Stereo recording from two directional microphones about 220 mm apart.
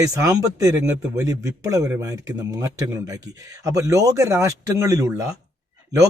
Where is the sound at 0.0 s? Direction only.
15° right (ahead or behind).